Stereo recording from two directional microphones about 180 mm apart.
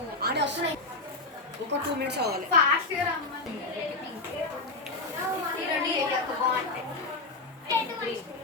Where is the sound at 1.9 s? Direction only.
65° right (ahead or behind).